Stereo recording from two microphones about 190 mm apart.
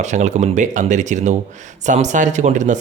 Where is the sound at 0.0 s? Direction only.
40° right (ahead or behind).